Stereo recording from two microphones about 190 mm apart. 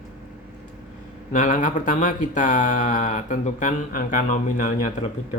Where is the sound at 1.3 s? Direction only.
40° left (ahead or behind).